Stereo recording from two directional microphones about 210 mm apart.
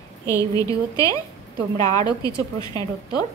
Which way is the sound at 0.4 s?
15° left (ahead or behind).